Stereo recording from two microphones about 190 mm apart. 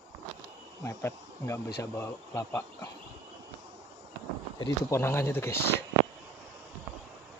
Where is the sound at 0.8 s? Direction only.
15° left (ahead or behind).